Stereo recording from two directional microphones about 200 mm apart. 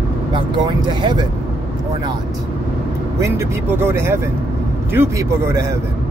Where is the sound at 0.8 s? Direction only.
20° right (ahead or behind).